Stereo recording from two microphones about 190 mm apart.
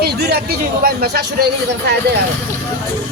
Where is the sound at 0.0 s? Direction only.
55° right (ahead or behind).